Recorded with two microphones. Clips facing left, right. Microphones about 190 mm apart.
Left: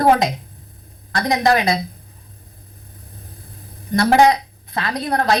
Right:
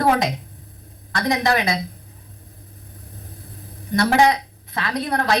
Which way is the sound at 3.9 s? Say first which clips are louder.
Left 3 dB; 35° left (ahead or behind).